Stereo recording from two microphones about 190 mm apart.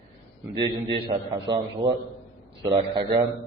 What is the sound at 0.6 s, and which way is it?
A man's voice, 25° right (ahead or behind).